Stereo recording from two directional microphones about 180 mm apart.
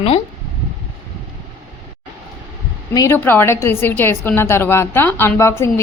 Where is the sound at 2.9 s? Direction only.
15° left (ahead or behind).